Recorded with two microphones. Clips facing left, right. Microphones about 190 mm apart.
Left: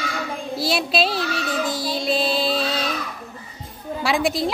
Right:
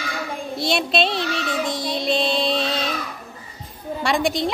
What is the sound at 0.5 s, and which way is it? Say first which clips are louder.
Child singing: right 1 dB; centre (ahead or behind).